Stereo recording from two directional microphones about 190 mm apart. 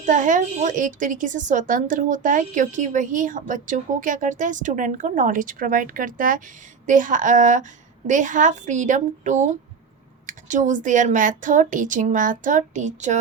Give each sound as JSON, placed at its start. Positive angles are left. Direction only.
{"t": 0.0, "sound": "a woman's voice", "side_deg": -40}